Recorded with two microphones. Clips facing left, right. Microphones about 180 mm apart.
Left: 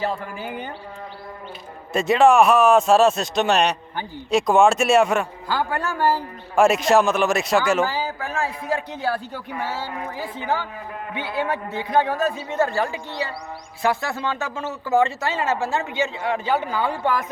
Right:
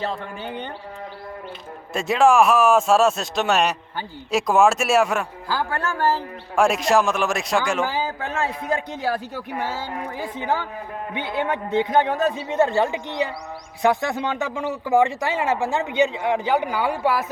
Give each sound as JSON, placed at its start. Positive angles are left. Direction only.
{"t": 0.1, "sound": "a woman's voice", "side_deg": 5}
{"t": 1.9, "sound": "a man's voice", "side_deg": 0}
{"t": 6.0, "sound": "a woman's voice", "side_deg": 10}
{"t": 6.6, "sound": "a man's voice", "side_deg": 0}
{"t": 7.9, "sound": "a man's voice", "side_deg": -20}
{"t": 11.1, "sound": "a man's voice", "side_deg": -20}